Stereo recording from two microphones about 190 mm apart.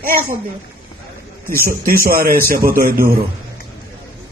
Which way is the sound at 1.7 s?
50° right (ahead or behind).